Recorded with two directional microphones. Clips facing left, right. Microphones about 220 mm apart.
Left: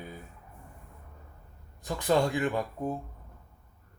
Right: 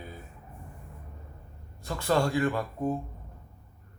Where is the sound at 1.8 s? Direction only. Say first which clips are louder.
Left 1 dB; 15° left (ahead or behind).